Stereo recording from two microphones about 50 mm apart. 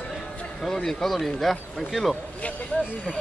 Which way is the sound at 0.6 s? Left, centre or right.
Centre.